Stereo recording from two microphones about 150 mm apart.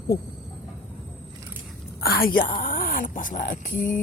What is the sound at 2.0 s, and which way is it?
Speech, 90° left.